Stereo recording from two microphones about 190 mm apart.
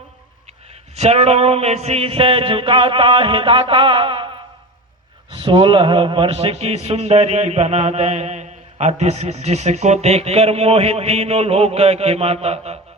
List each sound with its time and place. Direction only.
0.9 s a man's voice: 35° right (ahead or behind)
5.3 s a man's voice: 25° right (ahead or behind)